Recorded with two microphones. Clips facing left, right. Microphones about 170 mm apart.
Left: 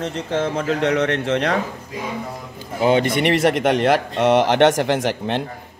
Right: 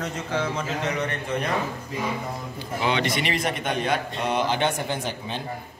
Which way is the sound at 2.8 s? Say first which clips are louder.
Left 8 dB; 50° left (ahead or behind).